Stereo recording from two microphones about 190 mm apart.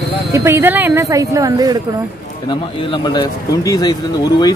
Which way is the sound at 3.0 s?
20° left (ahead or behind).